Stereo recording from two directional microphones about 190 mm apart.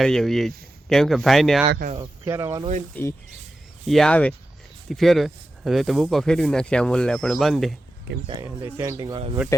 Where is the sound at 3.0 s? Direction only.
10° left (ahead or behind).